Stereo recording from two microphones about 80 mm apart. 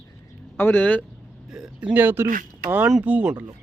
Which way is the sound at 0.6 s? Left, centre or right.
Left.